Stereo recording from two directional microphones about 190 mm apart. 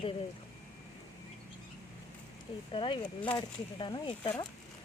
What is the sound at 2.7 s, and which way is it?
Speech, 25° left (ahead or behind).